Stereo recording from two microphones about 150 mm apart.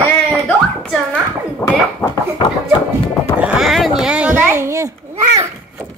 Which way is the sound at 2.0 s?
25° left (ahead or behind).